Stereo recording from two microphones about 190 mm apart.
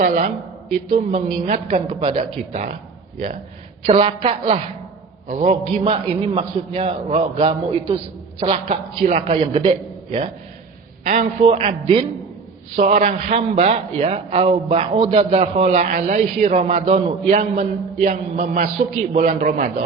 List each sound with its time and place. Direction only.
0.0 s a man's voice: 40° right (ahead or behind)
3.8 s a man's voice: 30° right (ahead or behind)
8.6 s a man's voice: 40° right (ahead or behind)